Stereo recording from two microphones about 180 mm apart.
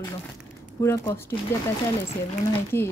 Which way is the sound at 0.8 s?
15° left (ahead or behind).